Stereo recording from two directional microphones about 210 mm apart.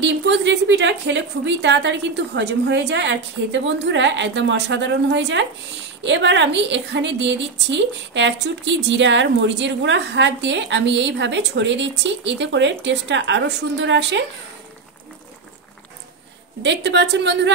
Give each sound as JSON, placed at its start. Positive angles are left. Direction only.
{"t": 0.0, "sound": "a woman's voice", "side_deg": -60}
{"t": 16.6, "sound": "a woman's voice", "side_deg": -55}